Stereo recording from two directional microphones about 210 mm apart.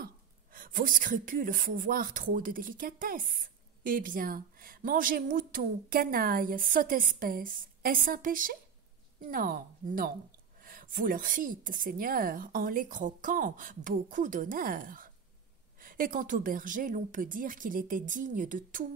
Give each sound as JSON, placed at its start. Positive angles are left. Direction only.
{"t": 0.0, "sound": "a woman's voice", "side_deg": -40}